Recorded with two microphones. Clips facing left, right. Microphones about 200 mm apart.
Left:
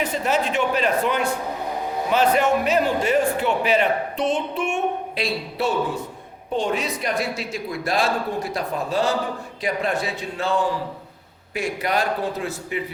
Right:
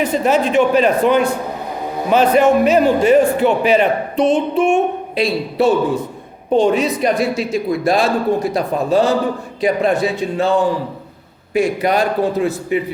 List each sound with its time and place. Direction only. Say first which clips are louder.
0.0 s speech: right 7 dB; 15° right (ahead or behind)
11.5 s speech: right 8 dB; 15° right (ahead or behind)